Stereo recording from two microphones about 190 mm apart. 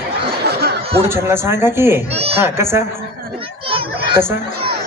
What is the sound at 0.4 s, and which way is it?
Snicker, 60° right (ahead or behind).